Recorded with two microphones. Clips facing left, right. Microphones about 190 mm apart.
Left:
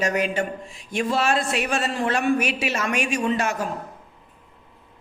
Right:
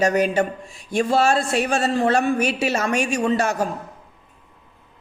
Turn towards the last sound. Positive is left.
turn(degrees=-40)  # may be behind; listen again after turning